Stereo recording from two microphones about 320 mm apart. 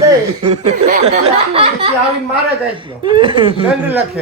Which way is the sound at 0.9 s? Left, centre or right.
Right.